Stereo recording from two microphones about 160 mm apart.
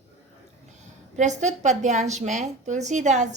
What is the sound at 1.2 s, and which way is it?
A woman's voice, 50° right (ahead or behind).